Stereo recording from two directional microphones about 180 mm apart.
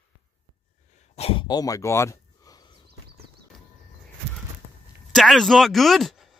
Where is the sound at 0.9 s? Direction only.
35° left (ahead or behind).